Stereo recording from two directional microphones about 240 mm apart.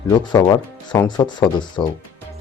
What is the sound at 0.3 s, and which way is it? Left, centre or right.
Speech, centre.